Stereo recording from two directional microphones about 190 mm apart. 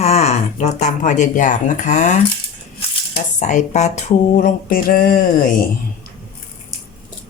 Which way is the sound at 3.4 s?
40° left (ahead or behind).